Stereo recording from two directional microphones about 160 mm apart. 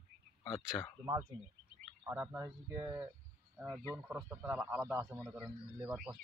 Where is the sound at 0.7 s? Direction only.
15° left (ahead or behind).